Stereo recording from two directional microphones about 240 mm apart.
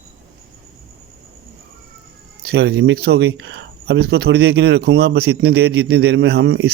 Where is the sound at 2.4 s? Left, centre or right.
Right.